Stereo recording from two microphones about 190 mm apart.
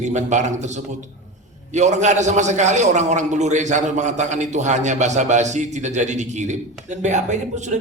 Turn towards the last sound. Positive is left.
turn(degrees=-40)  # may be behind; listen again after turning